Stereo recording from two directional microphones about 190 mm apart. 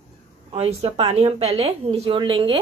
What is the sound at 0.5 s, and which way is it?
Speech, 35° right (ahead or behind).